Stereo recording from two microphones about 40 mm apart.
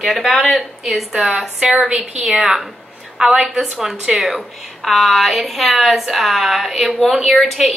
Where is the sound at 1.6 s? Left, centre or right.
Centre.